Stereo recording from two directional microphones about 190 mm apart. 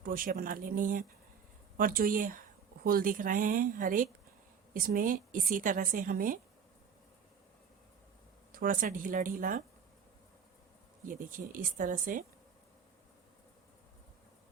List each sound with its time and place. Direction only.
0.0 s a woman's voice: 50° right (ahead or behind)
8.5 s a woman's voice: 45° right (ahead or behind)
11.1 s a woman's voice: 45° right (ahead or behind)